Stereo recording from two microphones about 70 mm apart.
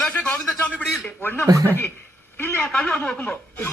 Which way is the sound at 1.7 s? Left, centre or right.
Left.